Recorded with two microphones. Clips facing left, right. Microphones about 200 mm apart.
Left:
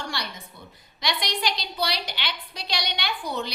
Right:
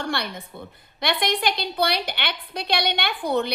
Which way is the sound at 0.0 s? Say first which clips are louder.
Right 6 dB; 55° right (ahead or behind).